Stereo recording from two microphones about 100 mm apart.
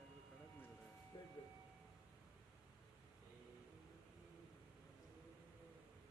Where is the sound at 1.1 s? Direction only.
55° left (ahead or behind).